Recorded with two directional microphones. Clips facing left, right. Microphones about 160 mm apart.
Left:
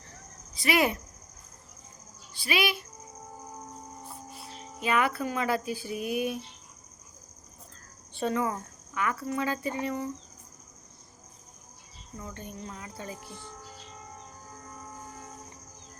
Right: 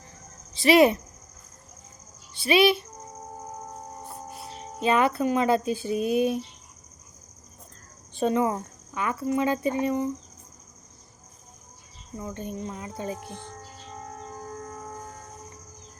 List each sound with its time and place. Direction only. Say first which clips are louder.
0.5 s speech: right 8 dB; 25° right (ahead or behind)
2.3 s speech: right 9 dB; 25° right (ahead or behind)
4.8 s speech: right 5 dB; 25° right (ahead or behind)
8.1 s speech: right 5 dB; 20° right (ahead or behind)
12.2 s speech: right 7 dB; 20° right (ahead or behind)